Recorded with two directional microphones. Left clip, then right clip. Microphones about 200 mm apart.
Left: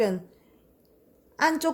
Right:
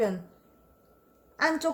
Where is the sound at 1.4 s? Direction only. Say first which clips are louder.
Left 3 dB; 40° left (ahead or behind).